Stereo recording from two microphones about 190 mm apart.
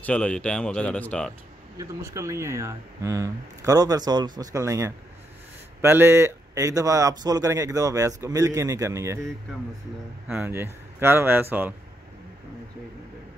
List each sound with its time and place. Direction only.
0.0 s speech: 5° left (ahead or behind)
1.8 s speech: 15° right (ahead or behind)
10.2 s speech: 10° right (ahead or behind)